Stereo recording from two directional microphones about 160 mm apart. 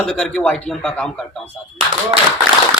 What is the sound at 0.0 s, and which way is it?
A man's voice, 5° left (ahead or behind).